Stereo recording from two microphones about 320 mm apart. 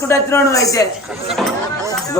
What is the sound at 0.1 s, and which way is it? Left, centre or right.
Speech, centre.